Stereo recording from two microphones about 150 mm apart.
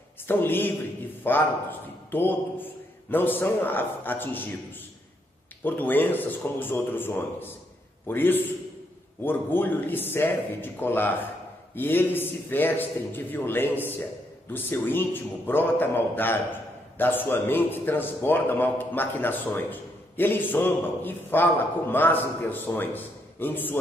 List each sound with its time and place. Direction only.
0.3 s a man's voice: 15° left (ahead or behind)
5.6 s a man's voice: 15° left (ahead or behind)